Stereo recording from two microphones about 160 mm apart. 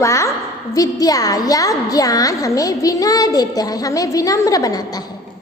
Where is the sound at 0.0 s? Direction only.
20° left (ahead or behind).